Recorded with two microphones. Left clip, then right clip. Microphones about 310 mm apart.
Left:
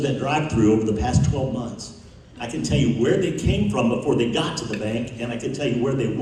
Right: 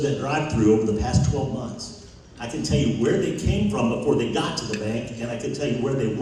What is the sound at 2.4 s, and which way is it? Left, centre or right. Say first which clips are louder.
A man's voice: left 1 dB; left.